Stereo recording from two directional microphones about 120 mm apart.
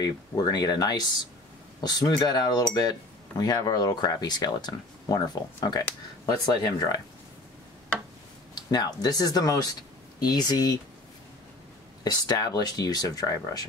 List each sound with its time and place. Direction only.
0.0 s speech: 35° left (ahead or behind)
8.5 s speech: 35° left (ahead or behind)
12.0 s speech: 35° left (ahead or behind)